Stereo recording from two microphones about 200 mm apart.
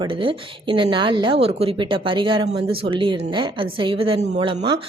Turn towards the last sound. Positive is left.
turn(degrees=-25)  # may be behind; listen again after turning